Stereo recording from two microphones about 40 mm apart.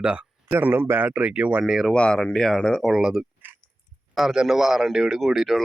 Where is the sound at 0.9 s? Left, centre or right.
Right.